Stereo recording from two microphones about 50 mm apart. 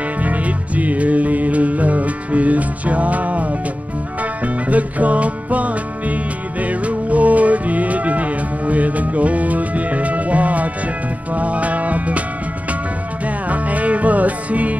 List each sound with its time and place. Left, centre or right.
0.2 s music: right
13.2 s music: right